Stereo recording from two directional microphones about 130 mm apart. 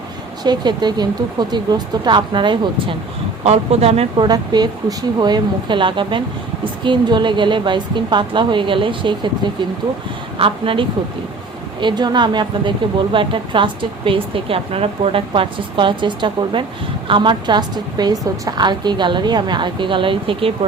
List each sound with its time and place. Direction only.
0.4 s speech: 35° right (ahead or behind)
3.4 s speech: 55° right (ahead or behind)
4.2 s speech: 30° right (ahead or behind)